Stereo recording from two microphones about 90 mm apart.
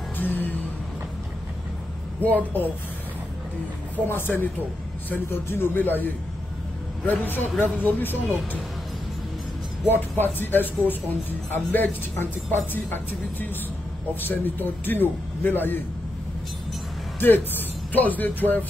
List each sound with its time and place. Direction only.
0.2 s music: 20° left (ahead or behind)
2.2 s a woman's voice: 20° left (ahead or behind)
3.9 s speech: 25° left (ahead or behind)
9.8 s speech: 25° left (ahead or behind)
17.2 s speech: 20° left (ahead or behind)